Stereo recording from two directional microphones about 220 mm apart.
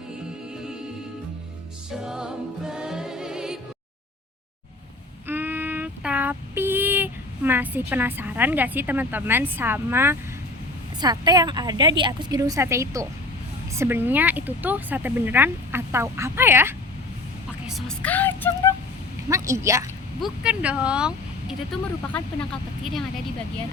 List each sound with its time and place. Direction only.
1.9 s music: centre (ahead or behind)
5.3 s child singing: 10° right (ahead or behind)
11.0 s speech: 20° right (ahead or behind)
17.7 s speech: centre (ahead or behind)
19.3 s speech: 15° right (ahead or behind)